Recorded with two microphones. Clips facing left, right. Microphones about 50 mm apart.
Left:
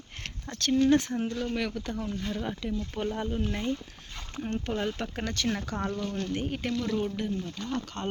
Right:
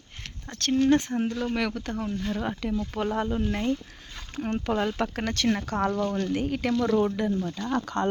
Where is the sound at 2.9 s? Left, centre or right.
Right.